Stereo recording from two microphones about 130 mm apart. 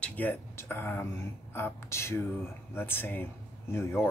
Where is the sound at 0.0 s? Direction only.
10° left (ahead or behind).